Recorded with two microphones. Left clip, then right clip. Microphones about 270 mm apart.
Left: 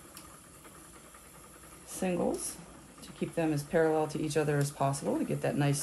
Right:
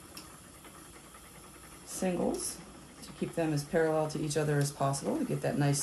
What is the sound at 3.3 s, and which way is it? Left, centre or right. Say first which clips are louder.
Speech: left 1 dB; left.